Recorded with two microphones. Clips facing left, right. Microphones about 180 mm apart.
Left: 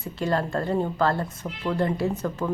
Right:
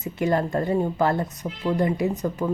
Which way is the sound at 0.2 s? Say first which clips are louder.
Right 3 dB; 15° right (ahead or behind).